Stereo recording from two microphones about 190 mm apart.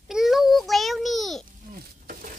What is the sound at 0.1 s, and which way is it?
Child singing, centre (ahead or behind).